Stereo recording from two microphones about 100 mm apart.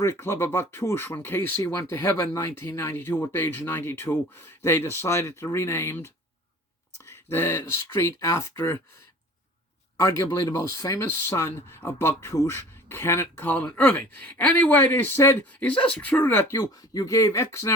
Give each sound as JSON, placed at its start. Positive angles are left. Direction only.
{"t": 0.0, "sound": "speech", "side_deg": 25}
{"t": 10.0, "sound": "speech", "side_deg": 30}
{"t": 16.9, "sound": "speech", "side_deg": 35}